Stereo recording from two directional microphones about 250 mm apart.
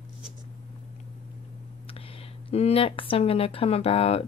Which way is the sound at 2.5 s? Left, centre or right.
Left.